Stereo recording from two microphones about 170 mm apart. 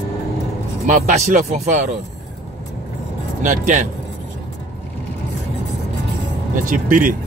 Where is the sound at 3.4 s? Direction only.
50° right (ahead or behind).